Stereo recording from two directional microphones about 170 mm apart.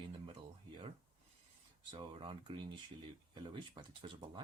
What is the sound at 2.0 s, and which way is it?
Speech, 30° right (ahead or behind).